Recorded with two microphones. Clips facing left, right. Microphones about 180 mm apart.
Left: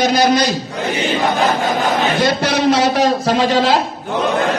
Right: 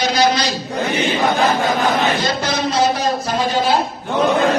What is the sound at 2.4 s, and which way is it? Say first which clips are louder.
Speech: left 3 dB; 75° left (ahead or behind).